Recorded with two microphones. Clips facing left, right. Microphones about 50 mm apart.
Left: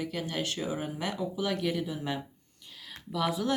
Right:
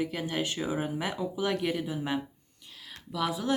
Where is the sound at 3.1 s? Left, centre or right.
Centre.